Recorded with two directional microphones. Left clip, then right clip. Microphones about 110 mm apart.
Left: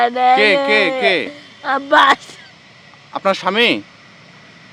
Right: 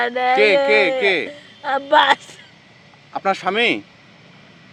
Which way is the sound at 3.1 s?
50° left (ahead or behind).